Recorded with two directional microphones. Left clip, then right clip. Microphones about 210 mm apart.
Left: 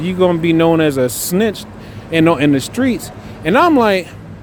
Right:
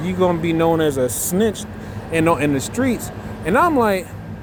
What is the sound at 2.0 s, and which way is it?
Speech, 50° left (ahead or behind).